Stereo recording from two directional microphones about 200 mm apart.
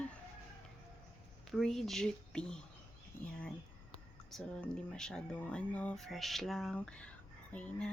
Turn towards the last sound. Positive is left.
turn(degrees=5)  # may be behind; listen again after turning